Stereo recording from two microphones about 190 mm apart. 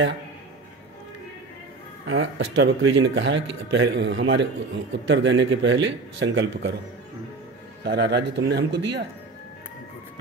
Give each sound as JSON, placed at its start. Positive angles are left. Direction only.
{"t": 2.0, "sound": "speech", "side_deg": -70}
{"t": 7.8, "sound": "speech", "side_deg": -60}